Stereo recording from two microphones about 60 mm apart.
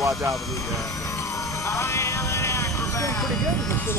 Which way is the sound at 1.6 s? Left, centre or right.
Left.